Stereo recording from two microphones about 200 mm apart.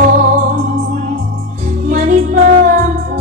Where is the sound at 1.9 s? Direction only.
40° right (ahead or behind).